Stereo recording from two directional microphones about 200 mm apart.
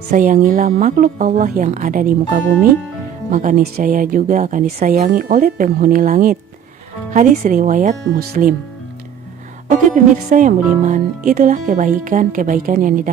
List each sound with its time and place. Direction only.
0.1 s speech: 40° right (ahead or behind)
9.7 s speech: 40° right (ahead or behind)